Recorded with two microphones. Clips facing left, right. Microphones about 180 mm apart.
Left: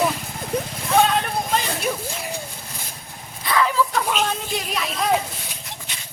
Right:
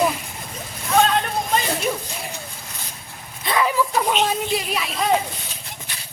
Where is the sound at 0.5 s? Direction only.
65° left (ahead or behind).